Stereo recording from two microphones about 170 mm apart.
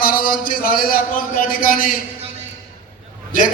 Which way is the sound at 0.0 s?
60° left (ahead or behind).